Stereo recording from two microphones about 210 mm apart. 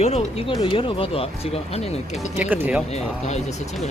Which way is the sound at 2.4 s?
10° right (ahead or behind).